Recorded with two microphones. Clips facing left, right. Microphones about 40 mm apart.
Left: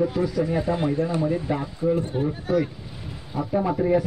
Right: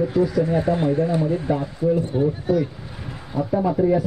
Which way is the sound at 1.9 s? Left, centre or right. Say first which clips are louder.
Right 2 dB; left.